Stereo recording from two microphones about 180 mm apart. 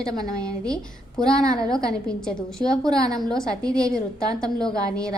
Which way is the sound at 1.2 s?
5° left (ahead or behind).